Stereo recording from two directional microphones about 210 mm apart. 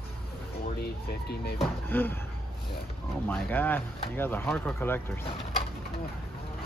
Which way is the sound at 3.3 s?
10° left (ahead or behind).